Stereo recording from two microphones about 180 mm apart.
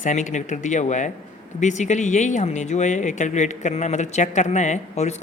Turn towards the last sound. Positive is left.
turn(degrees=40)  # may be behind; listen again after turning